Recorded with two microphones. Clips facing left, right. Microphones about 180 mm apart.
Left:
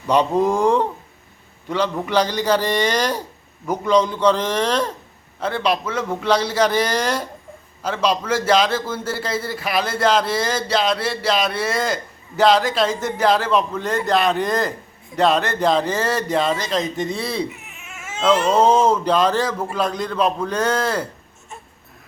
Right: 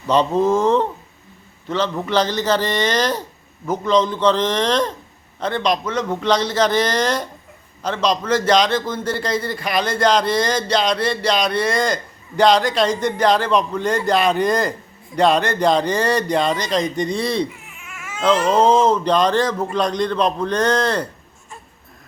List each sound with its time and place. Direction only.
0.1 s a man's voice: 10° left (ahead or behind)
17.5 s baby cry: 25° left (ahead or behind)
18.5 s a man's voice: 10° left (ahead or behind)